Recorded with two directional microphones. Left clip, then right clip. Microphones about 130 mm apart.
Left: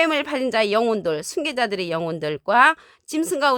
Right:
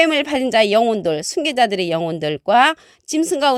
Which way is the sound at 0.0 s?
30° right (ahead or behind).